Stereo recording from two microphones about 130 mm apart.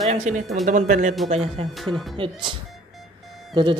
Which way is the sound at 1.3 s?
55° right (ahead or behind).